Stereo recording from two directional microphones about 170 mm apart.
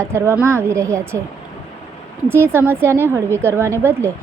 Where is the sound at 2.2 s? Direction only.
15° right (ahead or behind).